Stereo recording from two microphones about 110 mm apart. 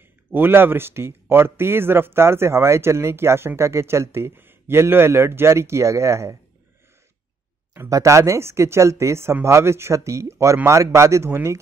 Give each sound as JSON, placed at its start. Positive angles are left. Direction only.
{"t": 0.3, "sound": "a man's voice", "side_deg": -20}
{"t": 7.7, "sound": "a man's voice", "side_deg": -30}